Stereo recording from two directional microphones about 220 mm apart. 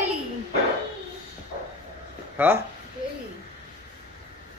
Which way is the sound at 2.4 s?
10° right (ahead or behind).